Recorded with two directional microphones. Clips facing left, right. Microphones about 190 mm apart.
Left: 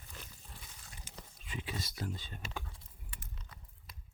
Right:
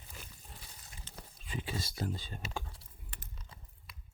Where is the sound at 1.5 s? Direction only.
30° right (ahead or behind).